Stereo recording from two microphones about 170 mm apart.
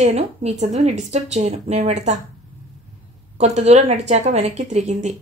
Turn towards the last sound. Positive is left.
turn(degrees=-45)  # may be behind; listen again after turning